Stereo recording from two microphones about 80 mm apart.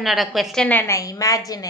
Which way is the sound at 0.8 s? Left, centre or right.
Left.